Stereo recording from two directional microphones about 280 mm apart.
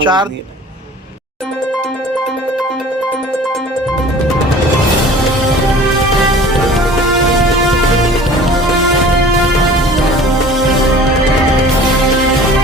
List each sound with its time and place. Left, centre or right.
0.0 s a man's voice: centre